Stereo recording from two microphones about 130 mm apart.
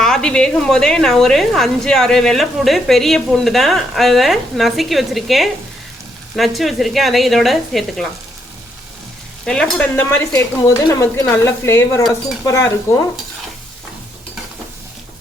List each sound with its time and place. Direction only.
0.0 s a woman's voice: 5° left (ahead or behind)
9.5 s speech: 10° left (ahead or behind); by 12.6 s 25° left (ahead or behind)